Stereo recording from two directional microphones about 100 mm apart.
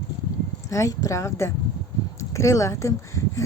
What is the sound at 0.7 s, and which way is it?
A woman's voice, 35° left (ahead or behind).